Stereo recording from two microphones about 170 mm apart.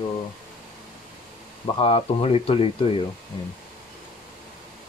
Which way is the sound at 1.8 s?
35° left (ahead or behind).